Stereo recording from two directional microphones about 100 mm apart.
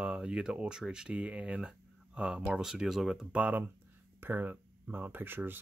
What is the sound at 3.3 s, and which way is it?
Speech, 15° right (ahead or behind).